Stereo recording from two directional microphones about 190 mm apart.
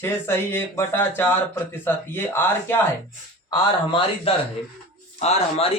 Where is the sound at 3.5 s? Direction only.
25° left (ahead or behind).